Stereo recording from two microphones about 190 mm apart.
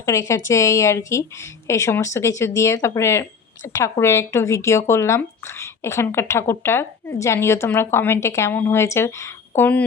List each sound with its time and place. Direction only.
0.0 s speech: 15° left (ahead or behind)